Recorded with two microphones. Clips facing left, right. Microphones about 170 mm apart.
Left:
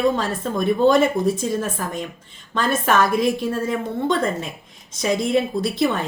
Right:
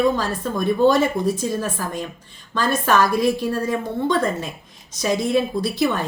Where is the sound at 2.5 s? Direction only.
20° left (ahead or behind).